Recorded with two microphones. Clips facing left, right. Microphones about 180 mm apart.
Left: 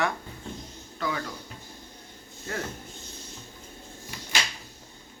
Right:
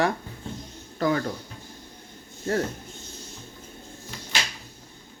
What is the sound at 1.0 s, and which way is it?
Speech, 45° right (ahead or behind).